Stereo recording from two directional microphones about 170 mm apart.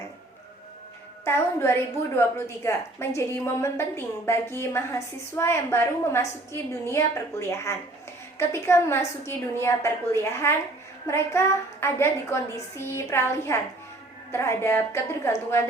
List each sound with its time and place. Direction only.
1.2 s a woman's voice: 15° left (ahead or behind)